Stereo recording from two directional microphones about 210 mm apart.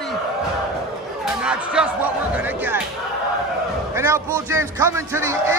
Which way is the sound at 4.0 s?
10° right (ahead or behind).